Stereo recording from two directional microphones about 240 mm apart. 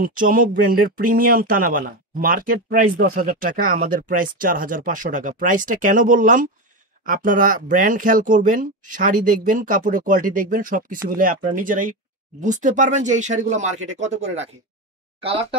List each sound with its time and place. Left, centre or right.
0.0 s speech: right